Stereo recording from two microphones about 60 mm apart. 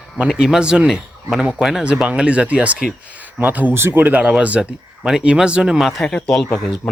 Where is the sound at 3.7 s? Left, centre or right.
Right; by 5.7 s centre.